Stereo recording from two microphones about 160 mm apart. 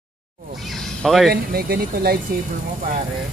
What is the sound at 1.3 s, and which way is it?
Speech, 70° right (ahead or behind).